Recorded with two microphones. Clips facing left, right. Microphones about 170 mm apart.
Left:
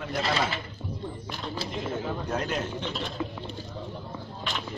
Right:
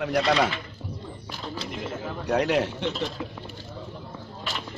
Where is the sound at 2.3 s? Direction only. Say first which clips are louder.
Right 11 dB; 75° right (ahead or behind).